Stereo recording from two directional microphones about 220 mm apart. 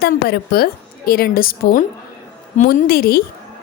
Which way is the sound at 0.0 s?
45° left (ahead or behind).